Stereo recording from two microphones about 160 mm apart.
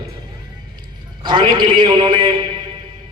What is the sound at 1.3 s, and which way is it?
A man's voice, 30° right (ahead or behind).